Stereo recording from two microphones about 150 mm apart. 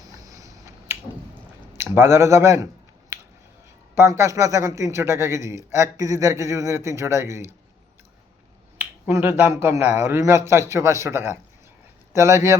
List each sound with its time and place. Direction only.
0.2 s finger snapping: 25° right (ahead or behind)
1.7 s speech: 15° right (ahead or behind)
3.1 s finger snapping: 15° right (ahead or behind)
3.9 s a man's voice: 20° right (ahead or behind)
8.8 s a man's voice: 15° right (ahead or behind)